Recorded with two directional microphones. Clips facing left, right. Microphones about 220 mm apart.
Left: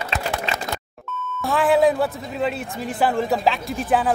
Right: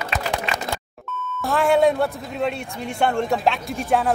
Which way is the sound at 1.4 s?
Centre (ahead or behind).